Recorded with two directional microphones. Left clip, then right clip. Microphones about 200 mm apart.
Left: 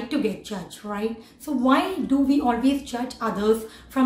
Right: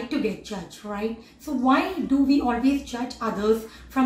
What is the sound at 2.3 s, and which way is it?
A woman's voice, centre (ahead or behind).